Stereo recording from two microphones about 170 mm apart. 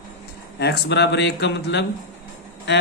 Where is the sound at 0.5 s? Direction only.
80° left.